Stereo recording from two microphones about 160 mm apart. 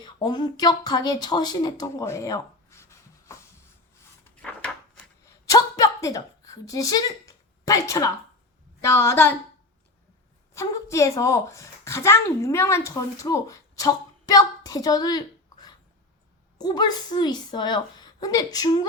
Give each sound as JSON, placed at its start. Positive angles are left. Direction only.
{"t": 0.0, "sound": "speech", "side_deg": 25}
{"t": 5.2, "sound": "a sound", "side_deg": 20}
{"t": 8.8, "sound": "a woman's voice", "side_deg": 20}
{"t": 10.5, "sound": "a woman's voice", "side_deg": 20}